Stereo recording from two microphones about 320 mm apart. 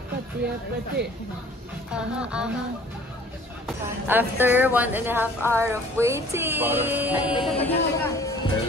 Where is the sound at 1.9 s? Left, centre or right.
Centre.